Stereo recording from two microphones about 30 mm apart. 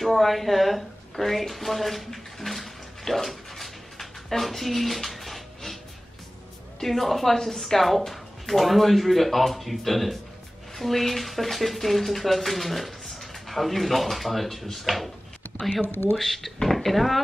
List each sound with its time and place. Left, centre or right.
0.0 s speech: centre
2.1 s bathtub: centre
6.8 s speech: centre
16.1 s speech: centre